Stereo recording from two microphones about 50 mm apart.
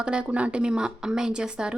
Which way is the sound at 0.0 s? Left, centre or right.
Centre.